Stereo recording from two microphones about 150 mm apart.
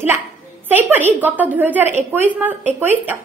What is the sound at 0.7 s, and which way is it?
A woman's voice, 15° right (ahead or behind).